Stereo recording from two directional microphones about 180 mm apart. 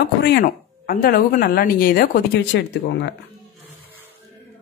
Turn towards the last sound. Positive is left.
turn(degrees=70)  # may be behind; listen again after turning